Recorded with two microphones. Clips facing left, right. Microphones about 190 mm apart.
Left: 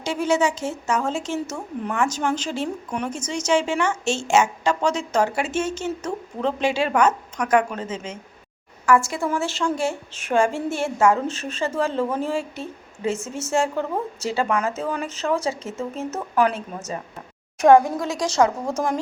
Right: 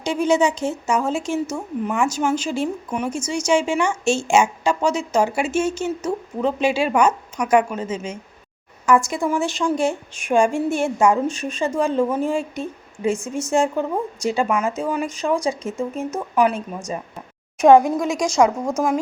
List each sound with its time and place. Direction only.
0.0 s speech: 15° right (ahead or behind)